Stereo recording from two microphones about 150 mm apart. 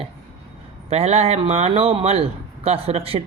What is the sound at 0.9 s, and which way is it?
A man's voice, 45° right (ahead or behind).